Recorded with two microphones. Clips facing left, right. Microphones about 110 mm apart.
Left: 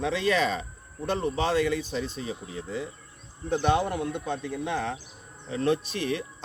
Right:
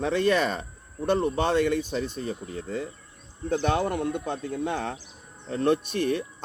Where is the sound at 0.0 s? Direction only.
50° right (ahead or behind).